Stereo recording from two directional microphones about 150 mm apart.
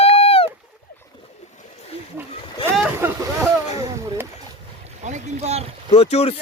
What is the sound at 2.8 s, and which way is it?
Speech, 15° right (ahead or behind).